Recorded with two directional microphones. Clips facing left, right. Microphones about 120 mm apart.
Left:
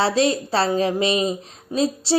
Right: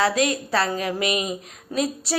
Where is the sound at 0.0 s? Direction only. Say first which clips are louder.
Left 2 dB; 30° left (ahead or behind).